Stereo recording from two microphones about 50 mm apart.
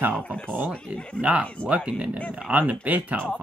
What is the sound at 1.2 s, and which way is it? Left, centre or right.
Speech, right.